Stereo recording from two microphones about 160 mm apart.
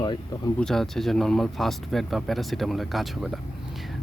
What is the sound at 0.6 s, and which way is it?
Speech, 5° left (ahead or behind).